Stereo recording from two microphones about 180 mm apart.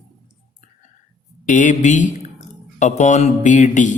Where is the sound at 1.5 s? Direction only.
45° left (ahead or behind).